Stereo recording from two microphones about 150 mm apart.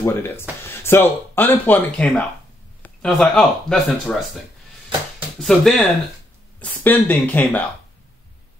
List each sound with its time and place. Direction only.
0.0 s speech: 15° left (ahead or behind)
5.4 s speech: centre (ahead or behind)